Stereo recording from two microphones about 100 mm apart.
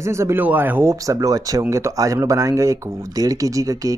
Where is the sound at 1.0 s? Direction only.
35° right (ahead or behind).